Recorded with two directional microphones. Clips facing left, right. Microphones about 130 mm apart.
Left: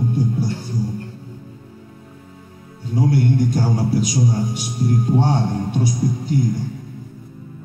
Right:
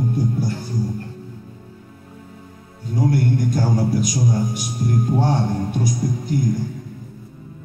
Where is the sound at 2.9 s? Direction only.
45° right (ahead or behind).